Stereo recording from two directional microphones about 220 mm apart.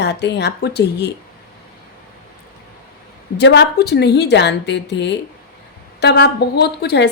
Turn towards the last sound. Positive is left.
turn(degrees=50)  # may be behind; listen again after turning